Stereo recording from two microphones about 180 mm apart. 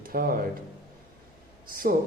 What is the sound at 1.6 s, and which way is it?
Speech, 55° right (ahead or behind).